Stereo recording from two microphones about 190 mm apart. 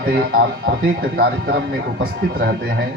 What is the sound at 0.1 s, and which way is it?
Speech, 55° right (ahead or behind).